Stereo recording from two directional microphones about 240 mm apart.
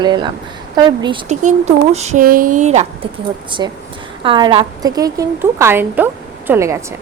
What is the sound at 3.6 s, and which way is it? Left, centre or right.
A woman's voice, centre.